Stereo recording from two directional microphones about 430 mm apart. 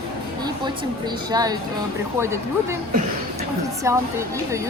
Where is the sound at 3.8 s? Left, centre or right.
Centre.